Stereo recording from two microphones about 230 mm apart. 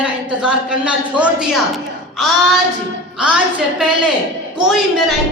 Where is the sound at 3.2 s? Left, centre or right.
Centre.